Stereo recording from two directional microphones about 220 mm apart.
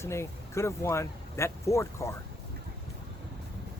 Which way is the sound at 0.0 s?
10° left (ahead or behind).